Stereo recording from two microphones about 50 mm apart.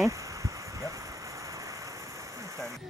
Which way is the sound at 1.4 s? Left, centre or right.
Right.